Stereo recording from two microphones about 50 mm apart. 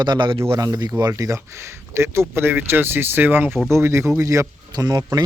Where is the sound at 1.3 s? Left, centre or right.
Right.